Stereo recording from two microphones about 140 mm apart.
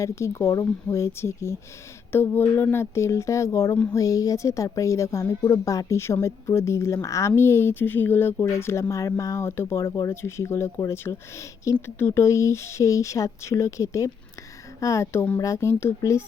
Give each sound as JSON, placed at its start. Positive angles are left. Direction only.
{"t": 0.0, "sound": "a woman's voice", "side_deg": 20}